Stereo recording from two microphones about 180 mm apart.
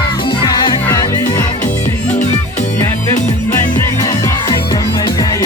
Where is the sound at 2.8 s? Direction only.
15° left (ahead or behind).